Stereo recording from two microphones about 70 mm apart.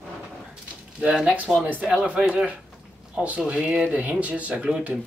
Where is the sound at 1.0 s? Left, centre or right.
Centre.